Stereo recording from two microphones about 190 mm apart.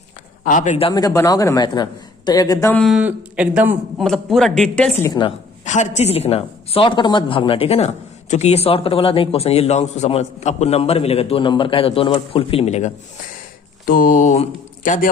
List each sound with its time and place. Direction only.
0.4 s a woman's voice: 40° left (ahead or behind)
0.9 s a man's voice: 20° left (ahead or behind)
2.8 s speech: 5° right (ahead or behind)
5.0 s a man's voice: 20° left (ahead or behind)
5.6 s a woman's voice: 40° left (ahead or behind)
13.8 s speech: 50° left (ahead or behind)